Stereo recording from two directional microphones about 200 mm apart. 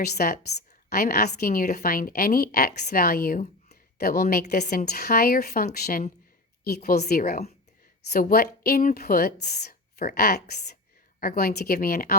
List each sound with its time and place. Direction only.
0.0 s a woman's voice: 50° left (ahead or behind)